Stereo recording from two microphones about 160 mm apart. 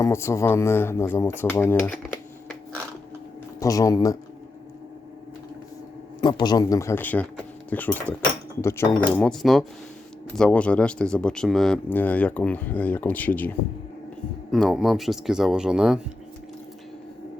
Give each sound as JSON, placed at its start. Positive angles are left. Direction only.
{"t": 0.0, "sound": "speech", "side_deg": 15}
{"t": 3.6, "sound": "a man's voice", "side_deg": 20}
{"t": 6.2, "sound": "a man's voice", "side_deg": 25}